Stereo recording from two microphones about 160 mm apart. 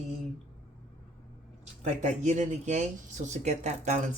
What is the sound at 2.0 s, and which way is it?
Speech, 50° right (ahead or behind).